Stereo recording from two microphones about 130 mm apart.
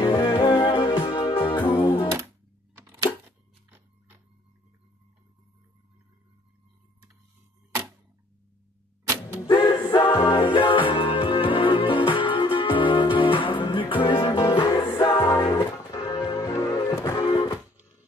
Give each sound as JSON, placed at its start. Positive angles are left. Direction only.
{"t": 0.0, "sound": "music", "side_deg": 35}
{"t": 2.1, "sound": "music", "side_deg": -20}
{"t": 9.0, "sound": "vehicle", "side_deg": -25}
{"t": 9.5, "sound": "a capella", "side_deg": 40}
{"t": 10.5, "sound": "music", "side_deg": 40}
{"t": 15.1, "sound": "music", "side_deg": 25}
{"t": 16.3, "sound": "music", "side_deg": 25}